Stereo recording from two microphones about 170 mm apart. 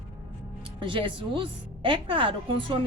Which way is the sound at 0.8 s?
30° right (ahead or behind).